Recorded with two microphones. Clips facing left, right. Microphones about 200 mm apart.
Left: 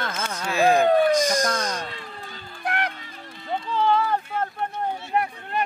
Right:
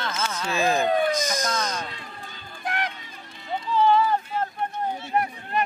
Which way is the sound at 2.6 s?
60° left (ahead or behind).